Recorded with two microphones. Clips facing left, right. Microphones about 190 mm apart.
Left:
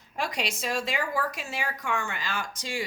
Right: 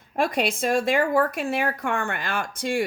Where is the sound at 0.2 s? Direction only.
55° right (ahead or behind).